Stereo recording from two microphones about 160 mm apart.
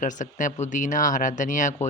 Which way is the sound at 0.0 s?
55° left (ahead or behind).